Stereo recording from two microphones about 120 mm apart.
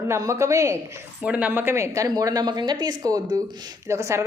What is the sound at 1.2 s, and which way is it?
A woman's voice, 10° right (ahead or behind).